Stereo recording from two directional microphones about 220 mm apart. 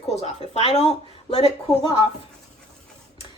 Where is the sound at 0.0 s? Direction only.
30° left (ahead or behind).